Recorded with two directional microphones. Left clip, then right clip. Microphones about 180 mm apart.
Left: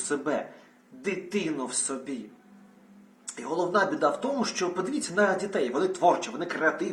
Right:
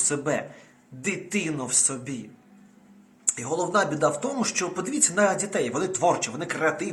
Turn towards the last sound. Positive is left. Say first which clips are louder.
# right 1 dB
turn(degrees=-20)  # may be behind; listen again after turning